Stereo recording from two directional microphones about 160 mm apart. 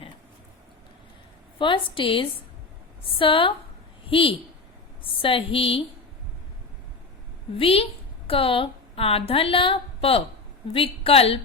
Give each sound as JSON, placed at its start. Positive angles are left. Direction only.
{"t": 1.5, "sound": "a woman's voice", "side_deg": 30}
{"t": 7.6, "sound": "a woman's voice", "side_deg": 35}